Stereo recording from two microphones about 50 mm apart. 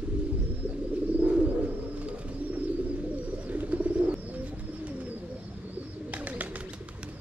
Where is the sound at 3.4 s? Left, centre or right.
Right.